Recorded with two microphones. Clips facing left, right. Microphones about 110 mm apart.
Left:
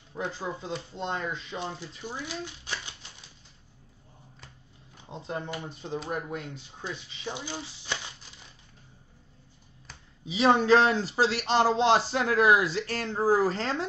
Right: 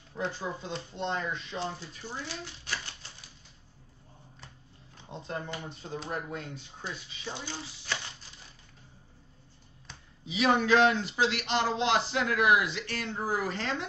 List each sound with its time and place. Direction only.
0.4 s speech: 25° left (ahead or behind)
5.2 s speech: 20° left (ahead or behind)
6.8 s speech: 15° left (ahead or behind)
10.2 s speech: 30° left (ahead or behind)